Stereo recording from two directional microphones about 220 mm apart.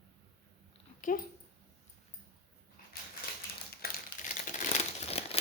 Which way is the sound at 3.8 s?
40° left (ahead or behind).